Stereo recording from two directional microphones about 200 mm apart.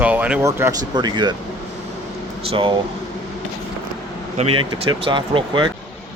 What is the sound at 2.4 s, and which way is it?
Speech, 25° right (ahead or behind).